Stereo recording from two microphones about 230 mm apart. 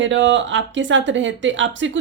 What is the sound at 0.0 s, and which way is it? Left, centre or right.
Speech, right.